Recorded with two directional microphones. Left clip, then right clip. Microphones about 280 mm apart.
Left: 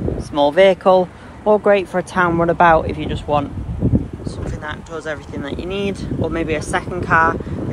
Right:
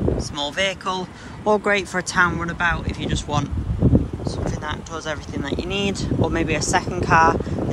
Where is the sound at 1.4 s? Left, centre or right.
Centre.